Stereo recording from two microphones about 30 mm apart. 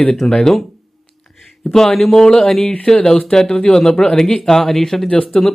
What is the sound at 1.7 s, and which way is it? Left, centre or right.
A man's voice, centre.